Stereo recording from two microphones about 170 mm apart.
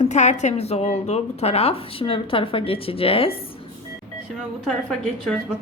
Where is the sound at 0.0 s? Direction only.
45° left (ahead or behind).